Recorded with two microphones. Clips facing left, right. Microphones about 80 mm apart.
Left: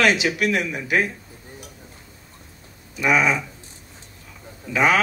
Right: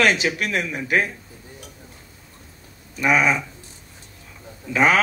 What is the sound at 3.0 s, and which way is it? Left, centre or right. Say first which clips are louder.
Speech: even; right.